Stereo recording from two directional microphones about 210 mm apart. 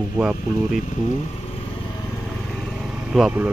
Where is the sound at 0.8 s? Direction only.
35° left (ahead or behind).